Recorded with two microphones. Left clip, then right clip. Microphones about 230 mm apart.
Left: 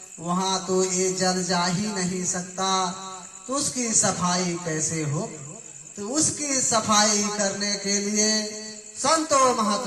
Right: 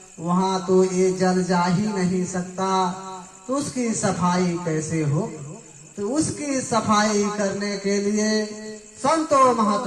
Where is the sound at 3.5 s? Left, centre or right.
Left.